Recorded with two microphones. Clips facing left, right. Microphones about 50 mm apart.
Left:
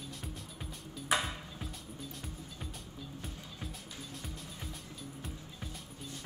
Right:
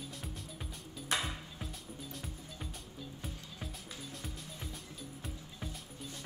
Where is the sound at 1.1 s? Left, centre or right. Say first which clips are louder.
Left 3 dB; centre.